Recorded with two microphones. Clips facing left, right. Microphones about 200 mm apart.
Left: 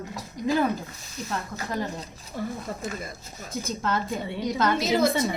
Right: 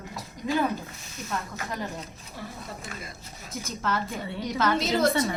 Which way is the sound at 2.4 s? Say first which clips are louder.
Left 8 dB; 50° left (ahead or behind).